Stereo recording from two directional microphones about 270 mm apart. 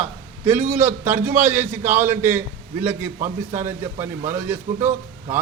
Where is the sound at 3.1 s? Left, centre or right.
Right.